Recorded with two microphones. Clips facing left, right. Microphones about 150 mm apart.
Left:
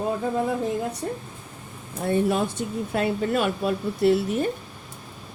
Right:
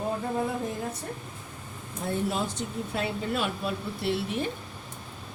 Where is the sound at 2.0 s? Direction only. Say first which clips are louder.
Left 7 dB; 60° left (ahead or behind); by 4.4 s 45° left (ahead or behind).